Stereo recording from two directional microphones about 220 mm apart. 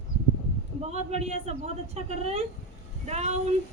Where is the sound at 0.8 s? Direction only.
30° right (ahead or behind).